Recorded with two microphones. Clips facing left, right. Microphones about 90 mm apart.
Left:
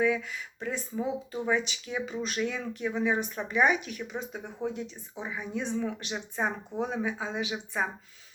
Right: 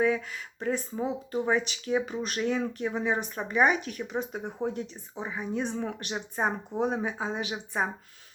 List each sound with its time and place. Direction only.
0.0 s speech: 40° right (ahead or behind)